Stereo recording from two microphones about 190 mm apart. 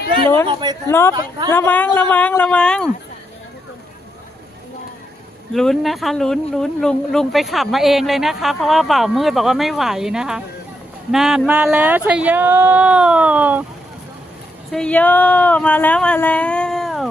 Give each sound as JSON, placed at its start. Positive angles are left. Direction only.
{"t": 0.4, "sound": "speech", "side_deg": -25}
{"t": 0.9, "sound": "speech", "side_deg": 15}
{"t": 5.5, "sound": "speech", "side_deg": 0}
{"t": 14.7, "sound": "speech", "side_deg": 5}